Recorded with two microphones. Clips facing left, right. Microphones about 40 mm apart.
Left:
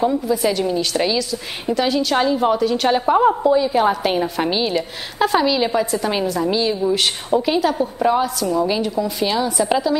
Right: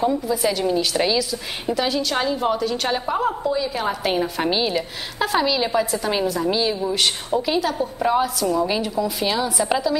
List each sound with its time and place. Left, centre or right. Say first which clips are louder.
0.0 s a woman's voice: left 2 dB; centre
3.2 s a woman's voice: left 7 dB; centre
3.9 s a woman's voice: left 3 dB; centre